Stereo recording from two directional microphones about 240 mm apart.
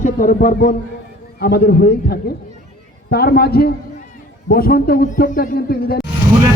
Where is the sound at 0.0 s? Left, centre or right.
Left.